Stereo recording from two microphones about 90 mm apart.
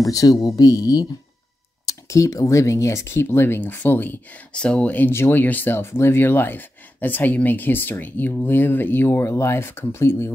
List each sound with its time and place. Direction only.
0.0 s speech: 40° left (ahead or behind)